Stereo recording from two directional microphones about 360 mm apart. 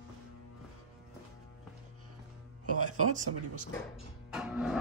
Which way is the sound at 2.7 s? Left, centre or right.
Right.